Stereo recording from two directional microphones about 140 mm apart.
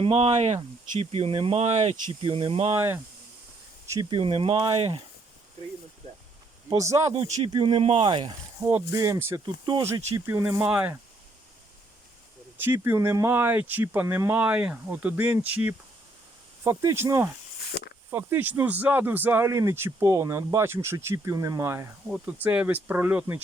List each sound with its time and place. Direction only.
0.0 s speech: 45° right (ahead or behind)
2.0 s speech: 40° right (ahead or behind)
2.7 s speech: 20° right (ahead or behind)
4.1 s speech: 40° right (ahead or behind)
7.3 s speech: 50° right (ahead or behind)
7.5 s speech: 35° right (ahead or behind)
8.6 s speech: 20° right (ahead or behind)
10.2 s speech: 20° right (ahead or behind)
12.5 s speech: 15° right (ahead or behind)